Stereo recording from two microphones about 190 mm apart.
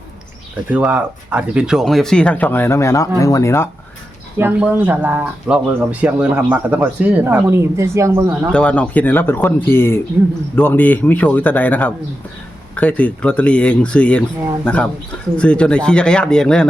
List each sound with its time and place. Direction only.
0.7 s speech: 10° right (ahead or behind); by 3.7 s 15° left (ahead or behind)
4.4 s speech: 10° right (ahead or behind)
8.5 s speech: 5° left (ahead or behind)